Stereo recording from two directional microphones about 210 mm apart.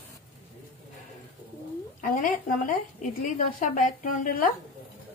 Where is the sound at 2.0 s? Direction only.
40° left (ahead or behind).